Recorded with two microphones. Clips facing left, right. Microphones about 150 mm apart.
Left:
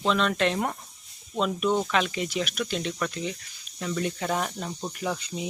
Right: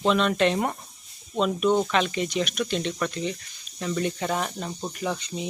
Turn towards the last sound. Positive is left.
turn(degrees=5)  # may be behind; listen again after turning